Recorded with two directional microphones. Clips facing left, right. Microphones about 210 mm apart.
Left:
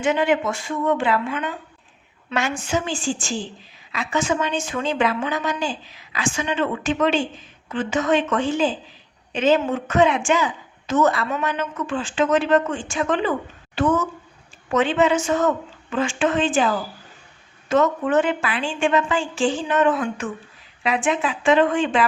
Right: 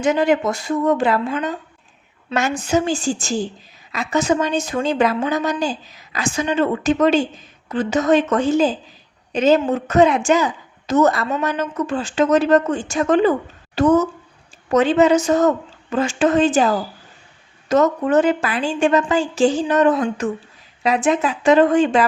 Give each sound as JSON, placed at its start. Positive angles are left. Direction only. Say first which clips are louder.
{"t": 0.0, "sound": "a woman's voice", "louder": "right 3 dB", "side_deg": -40}